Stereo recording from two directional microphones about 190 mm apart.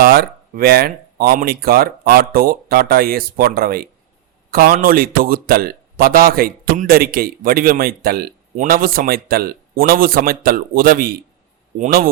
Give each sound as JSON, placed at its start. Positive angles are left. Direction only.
{"t": 0.0, "sound": "a man's voice", "side_deg": -50}